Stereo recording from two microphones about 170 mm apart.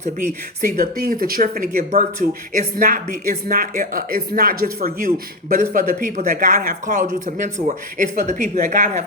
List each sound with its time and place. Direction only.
0.6 s speech: 60° right (ahead or behind)